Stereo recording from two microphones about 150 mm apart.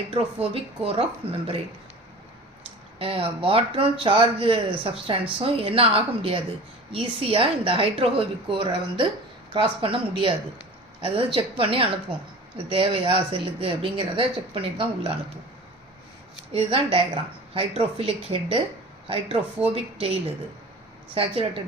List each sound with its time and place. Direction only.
0.1 s a woman's voice: 40° right (ahead or behind)
3.0 s a woman's voice: 40° right (ahead or behind)
16.5 s a woman's voice: 40° right (ahead or behind)